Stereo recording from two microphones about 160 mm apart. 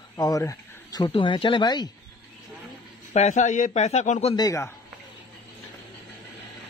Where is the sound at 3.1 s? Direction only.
45° left (ahead or behind).